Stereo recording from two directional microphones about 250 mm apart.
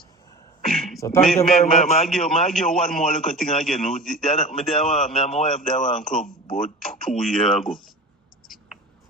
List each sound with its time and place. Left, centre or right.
0.6 s a sound: centre
1.2 s a man's voice: centre
1.6 s a man's voice: left
2.0 s a man's voice: centre
5.7 s a man's voice: left
6.0 s a man's voice: centre